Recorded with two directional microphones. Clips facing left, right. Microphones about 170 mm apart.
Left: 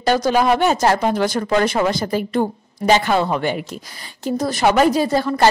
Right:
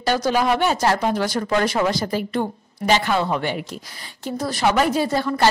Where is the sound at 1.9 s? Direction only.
50° left (ahead or behind).